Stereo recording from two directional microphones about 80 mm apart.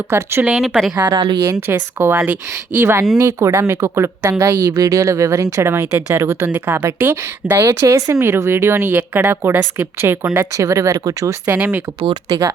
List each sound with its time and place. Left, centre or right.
0.1 s a woman's voice: right
0.5 s a woman's voice: centre
1.1 s speech: right
1.6 s a woman's voice: right
6.5 s a woman's voice: right
7.7 s a woman's voice: right
11.4 s speech: centre